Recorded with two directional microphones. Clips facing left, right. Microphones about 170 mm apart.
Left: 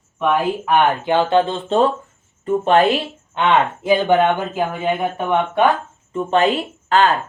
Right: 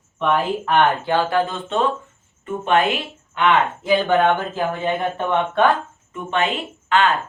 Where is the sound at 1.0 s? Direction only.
20° left (ahead or behind).